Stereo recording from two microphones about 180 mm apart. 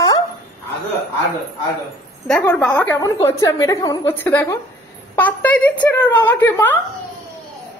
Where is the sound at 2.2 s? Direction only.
5° left (ahead or behind).